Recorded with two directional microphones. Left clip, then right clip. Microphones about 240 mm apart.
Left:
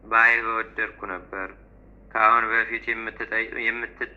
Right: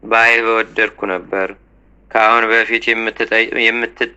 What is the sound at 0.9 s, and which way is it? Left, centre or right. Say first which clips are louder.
Speech: right 13 dB; right.